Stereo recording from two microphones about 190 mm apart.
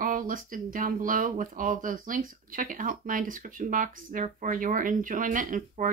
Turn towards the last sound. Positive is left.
turn(degrees=-45)  # may be behind; listen again after turning